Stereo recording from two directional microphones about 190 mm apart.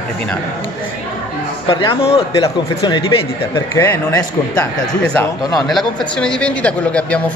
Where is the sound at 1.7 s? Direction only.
25° left (ahead or behind).